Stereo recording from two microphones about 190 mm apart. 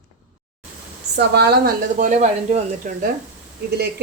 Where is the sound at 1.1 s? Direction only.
60° right (ahead or behind).